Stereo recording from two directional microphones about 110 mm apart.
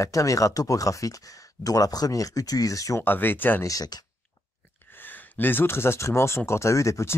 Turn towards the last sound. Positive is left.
turn(degrees=25)  # may be behind; listen again after turning